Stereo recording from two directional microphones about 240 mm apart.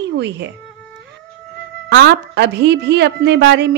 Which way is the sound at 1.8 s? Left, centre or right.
Right.